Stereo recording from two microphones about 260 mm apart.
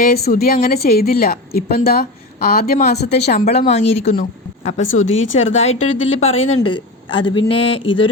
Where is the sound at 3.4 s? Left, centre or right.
Left.